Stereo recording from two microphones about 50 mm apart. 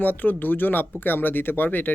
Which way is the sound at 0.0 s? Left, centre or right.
Left.